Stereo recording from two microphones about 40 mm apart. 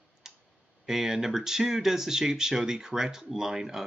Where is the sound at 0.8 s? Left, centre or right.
Centre.